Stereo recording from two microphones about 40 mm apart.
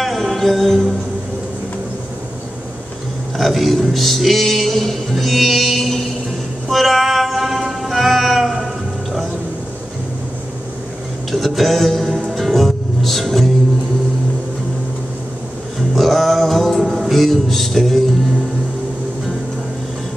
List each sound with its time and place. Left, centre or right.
0.0 s music: centre
3.3 s a sound: centre
6.7 s music: centre
11.3 s music: centre
15.9 s music: centre